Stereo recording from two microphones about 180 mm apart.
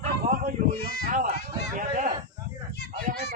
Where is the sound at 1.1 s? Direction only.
45° right (ahead or behind).